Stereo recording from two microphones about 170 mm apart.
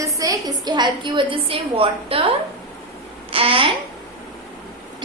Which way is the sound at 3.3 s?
30° right (ahead or behind).